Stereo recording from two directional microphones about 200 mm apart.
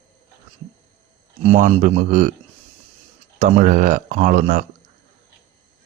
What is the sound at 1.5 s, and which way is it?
Speech, 40° right (ahead or behind).